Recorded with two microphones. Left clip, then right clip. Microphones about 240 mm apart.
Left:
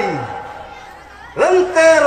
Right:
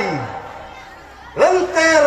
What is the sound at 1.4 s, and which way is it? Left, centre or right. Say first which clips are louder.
Speech: left 2 dB; left.